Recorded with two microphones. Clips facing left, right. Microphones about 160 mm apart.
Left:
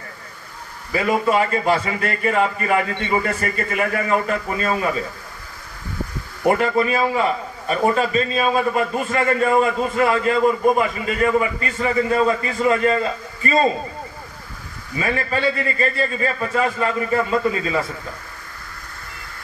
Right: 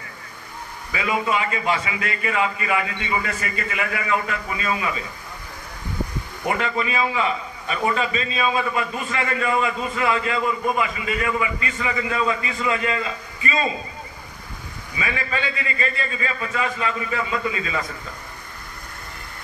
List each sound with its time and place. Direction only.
0.9 s a man's voice: 45° left (ahead or behind)
6.4 s a man's voice: 45° left (ahead or behind)
15.0 s a man's voice: 45° left (ahead or behind)